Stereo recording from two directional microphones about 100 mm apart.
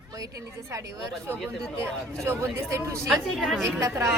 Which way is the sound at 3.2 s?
Centre (ahead or behind).